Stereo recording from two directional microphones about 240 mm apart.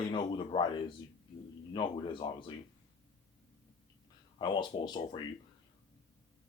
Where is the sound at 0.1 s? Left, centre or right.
Left.